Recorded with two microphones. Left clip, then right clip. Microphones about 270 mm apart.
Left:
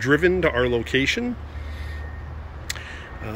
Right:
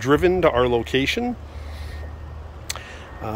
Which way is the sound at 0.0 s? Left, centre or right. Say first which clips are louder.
Right 2 dB; centre.